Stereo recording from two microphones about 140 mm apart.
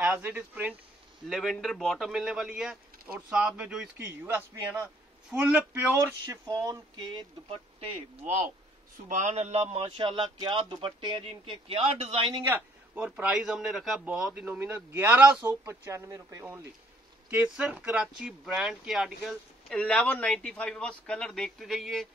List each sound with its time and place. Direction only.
0.0 s speech: 10° right (ahead or behind)
1.3 s a man's voice: centre (ahead or behind)
6.2 s a sound: 20° right (ahead or behind)
7.4 s speech: 40° right (ahead or behind)
9.1 s a man's voice: 60° right (ahead or behind); by 12.4 s 35° right (ahead or behind)
12.4 s speech: 10° right (ahead or behind)
19.7 s speech: 10° left (ahead or behind)